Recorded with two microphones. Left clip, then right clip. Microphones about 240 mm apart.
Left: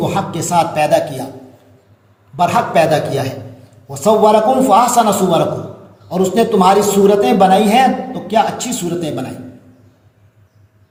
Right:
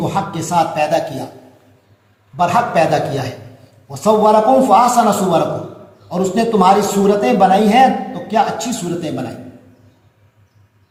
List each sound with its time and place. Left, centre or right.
0.0 s a man's voice: left
2.3 s a man's voice: left